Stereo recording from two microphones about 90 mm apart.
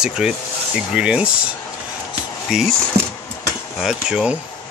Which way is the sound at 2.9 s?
90° right.